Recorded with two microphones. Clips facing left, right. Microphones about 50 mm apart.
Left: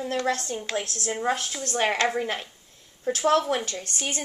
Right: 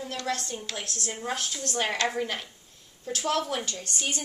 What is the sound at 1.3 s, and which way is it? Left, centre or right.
A woman's voice, left.